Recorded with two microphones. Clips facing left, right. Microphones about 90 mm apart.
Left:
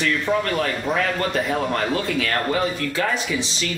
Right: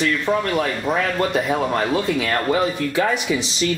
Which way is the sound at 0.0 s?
5° right (ahead or behind).